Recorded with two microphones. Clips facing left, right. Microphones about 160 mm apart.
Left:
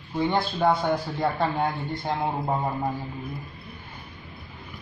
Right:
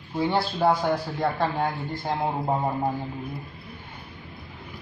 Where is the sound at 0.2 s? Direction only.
5° right (ahead or behind).